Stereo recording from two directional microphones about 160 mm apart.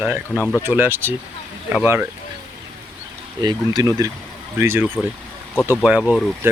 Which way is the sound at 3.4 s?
25° right (ahead or behind).